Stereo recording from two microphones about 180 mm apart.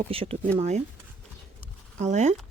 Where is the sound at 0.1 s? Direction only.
30° right (ahead or behind).